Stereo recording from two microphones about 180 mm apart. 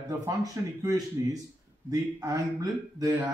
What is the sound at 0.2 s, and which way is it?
A man's voice, 20° right (ahead or behind).